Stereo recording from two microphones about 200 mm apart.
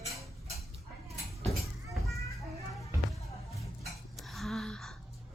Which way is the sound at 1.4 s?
Centre (ahead or behind).